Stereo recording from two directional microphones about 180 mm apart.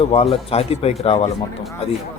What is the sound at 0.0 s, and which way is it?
Speech, 35° left (ahead or behind).